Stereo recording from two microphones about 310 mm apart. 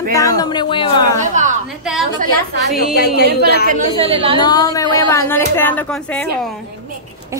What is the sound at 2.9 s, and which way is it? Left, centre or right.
Speech, left.